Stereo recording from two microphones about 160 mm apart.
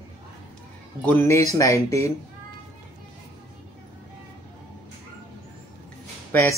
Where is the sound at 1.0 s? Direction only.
15° left (ahead or behind).